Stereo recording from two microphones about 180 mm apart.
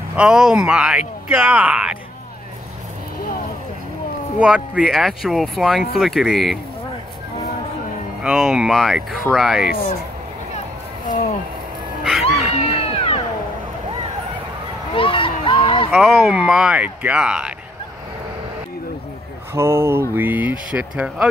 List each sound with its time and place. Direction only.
0.1 s speech: 5° right (ahead or behind)
4.4 s speech: 5° right (ahead or behind)
8.2 s speech: 5° right (ahead or behind)
12.0 s dog: centre (ahead or behind)
12.5 s cat: 35° left (ahead or behind)
15.0 s a sound: 30° left (ahead or behind)
15.9 s speech: centre (ahead or behind)
19.5 s speech: 15° right (ahead or behind)